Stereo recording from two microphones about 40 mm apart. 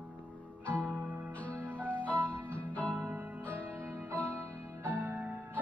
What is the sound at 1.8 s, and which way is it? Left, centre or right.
Music, left.